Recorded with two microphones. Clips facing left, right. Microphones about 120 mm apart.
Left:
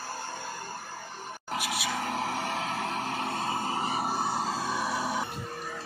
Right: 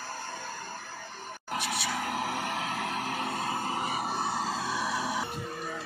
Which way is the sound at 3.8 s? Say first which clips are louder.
Left 2 dB; 35° left (ahead or behind).